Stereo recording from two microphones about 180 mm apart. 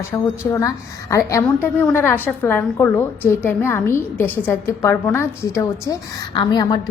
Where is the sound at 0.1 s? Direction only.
15° left (ahead or behind).